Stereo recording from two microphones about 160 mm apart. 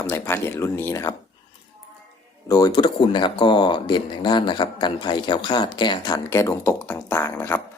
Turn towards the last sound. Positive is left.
turn(degrees=15)  # may be behind; listen again after turning